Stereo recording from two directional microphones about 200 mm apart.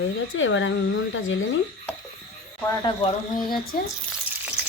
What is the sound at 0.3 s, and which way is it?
Speech, 75° left (ahead or behind).